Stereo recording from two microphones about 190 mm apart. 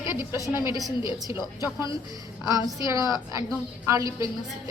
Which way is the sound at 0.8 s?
20° right (ahead or behind).